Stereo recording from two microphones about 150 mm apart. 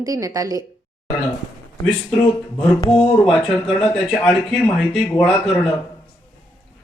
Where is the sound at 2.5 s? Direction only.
35° left (ahead or behind).